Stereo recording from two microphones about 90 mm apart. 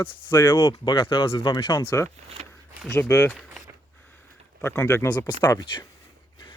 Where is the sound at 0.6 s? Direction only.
60° left (ahead or behind); by 1.5 s 80° left.